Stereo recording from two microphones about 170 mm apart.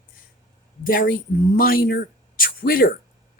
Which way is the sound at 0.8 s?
55° left (ahead or behind).